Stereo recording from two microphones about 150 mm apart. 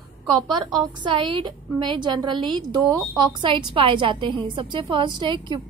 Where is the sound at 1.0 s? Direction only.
30° right (ahead or behind).